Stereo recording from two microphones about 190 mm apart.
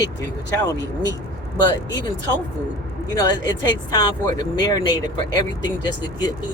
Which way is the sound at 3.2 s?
20° left (ahead or behind).